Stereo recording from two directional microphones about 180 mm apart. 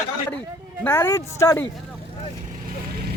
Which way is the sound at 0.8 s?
15° left (ahead or behind).